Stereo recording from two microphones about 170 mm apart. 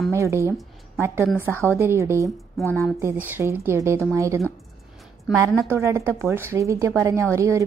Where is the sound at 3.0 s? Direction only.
15° right (ahead or behind).